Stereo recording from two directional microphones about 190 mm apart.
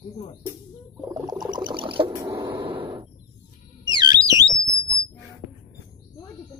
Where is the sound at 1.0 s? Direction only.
20° right (ahead or behind).